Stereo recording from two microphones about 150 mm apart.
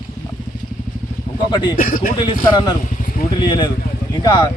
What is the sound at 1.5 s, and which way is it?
Speech, 30° left (ahead or behind).